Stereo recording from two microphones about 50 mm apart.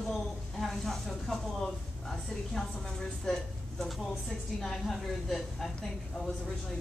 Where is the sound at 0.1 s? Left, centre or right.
Centre.